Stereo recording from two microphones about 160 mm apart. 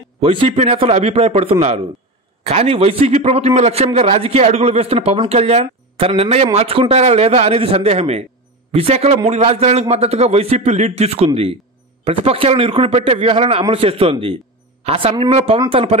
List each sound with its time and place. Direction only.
0.2 s a man's voice: 40° right (ahead or behind)